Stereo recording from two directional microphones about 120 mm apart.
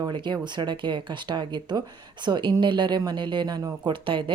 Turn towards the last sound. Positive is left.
turn(degrees=-40)  # may be behind; listen again after turning